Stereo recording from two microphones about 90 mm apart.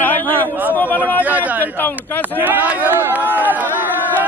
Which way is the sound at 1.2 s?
20° right (ahead or behind).